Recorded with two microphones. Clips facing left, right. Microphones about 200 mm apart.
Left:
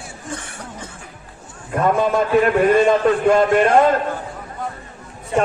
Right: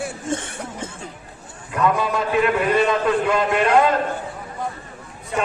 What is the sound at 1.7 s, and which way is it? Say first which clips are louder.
A man's voice: left 3 dB; 45° left (ahead or behind).